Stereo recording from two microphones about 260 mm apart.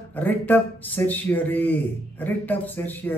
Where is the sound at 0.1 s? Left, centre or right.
Centre.